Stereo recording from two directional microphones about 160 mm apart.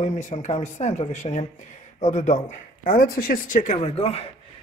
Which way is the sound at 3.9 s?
40° left (ahead or behind).